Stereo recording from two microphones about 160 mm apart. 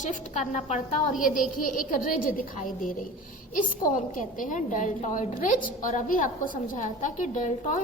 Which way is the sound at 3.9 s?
55° left (ahead or behind).